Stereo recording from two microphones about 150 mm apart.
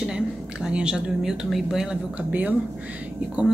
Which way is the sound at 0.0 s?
5° right (ahead or behind).